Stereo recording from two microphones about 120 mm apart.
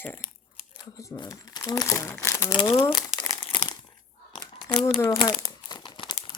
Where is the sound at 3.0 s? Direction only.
30° left (ahead or behind).